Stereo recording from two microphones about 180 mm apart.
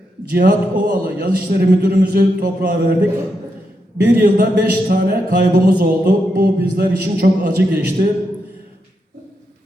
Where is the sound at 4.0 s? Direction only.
60° right (ahead or behind).